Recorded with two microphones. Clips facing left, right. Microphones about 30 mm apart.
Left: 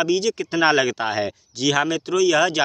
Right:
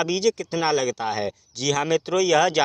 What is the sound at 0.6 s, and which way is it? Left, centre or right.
Speech, left.